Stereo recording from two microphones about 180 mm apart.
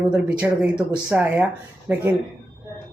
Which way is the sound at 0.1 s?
5° right (ahead or behind).